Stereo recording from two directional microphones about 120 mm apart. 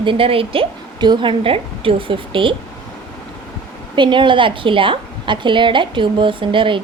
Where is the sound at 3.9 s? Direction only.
40° right (ahead or behind).